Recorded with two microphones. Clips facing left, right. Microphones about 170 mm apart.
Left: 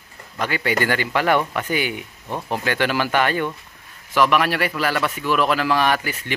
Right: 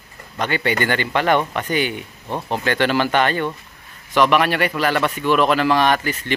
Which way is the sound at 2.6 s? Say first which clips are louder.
Right 3 dB; 10° left (ahead or behind).